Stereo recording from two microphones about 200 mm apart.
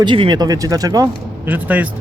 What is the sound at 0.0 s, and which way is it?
Speech, 25° right (ahead or behind).